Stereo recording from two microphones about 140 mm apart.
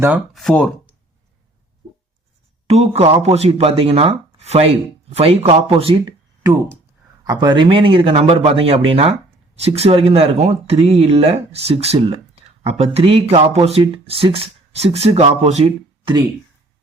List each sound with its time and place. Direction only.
0.3 s speech: 5° left (ahead or behind)
2.6 s speech: 50° right (ahead or behind)
16.0 s speech: 30° right (ahead or behind)